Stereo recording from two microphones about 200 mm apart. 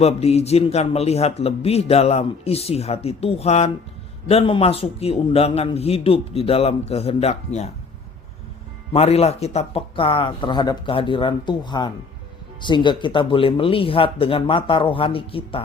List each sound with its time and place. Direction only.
0.0 s a man's voice: 30° left (ahead or behind)
8.9 s a man's voice: 30° left (ahead or behind)